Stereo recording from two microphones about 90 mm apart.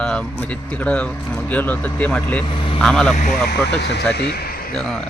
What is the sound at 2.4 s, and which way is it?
Speech, 65° left (ahead or behind).